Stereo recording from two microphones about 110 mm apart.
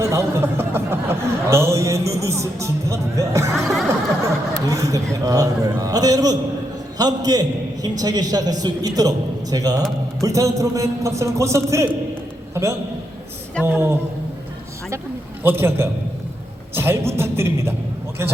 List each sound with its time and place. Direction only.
0.0 s speech: 25° right (ahead or behind)
3.6 s music: centre (ahead or behind)
4.5 s a sound: 30° right (ahead or behind)
5.2 s a man's voice: 30° right (ahead or behind)
13.7 s a man's voice: 20° right (ahead or behind)
15.4 s a man's voice: 20° right (ahead or behind)